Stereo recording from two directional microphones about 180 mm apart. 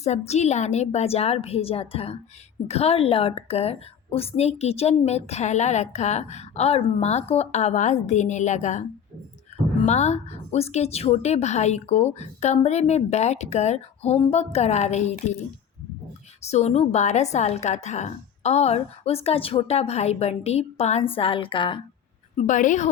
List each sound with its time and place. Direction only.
0.0 s a woman's voice: 40° left (ahead or behind)
9.8 s a woman's voice: 40° left (ahead or behind)
16.4 s a woman's voice: 35° left (ahead or behind)
22.4 s a woman's voice: 45° left (ahead or behind)